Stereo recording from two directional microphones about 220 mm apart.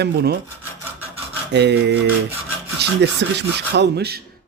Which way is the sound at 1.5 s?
50° right (ahead or behind).